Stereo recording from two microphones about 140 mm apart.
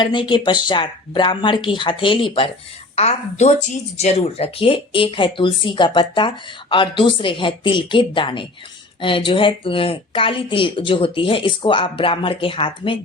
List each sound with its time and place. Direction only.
0.0 s speech: 35° left (ahead or behind)
2.9 s speech: 50° left (ahead or behind)